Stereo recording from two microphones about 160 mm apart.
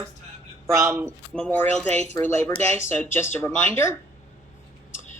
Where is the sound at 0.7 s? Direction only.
15° right (ahead or behind).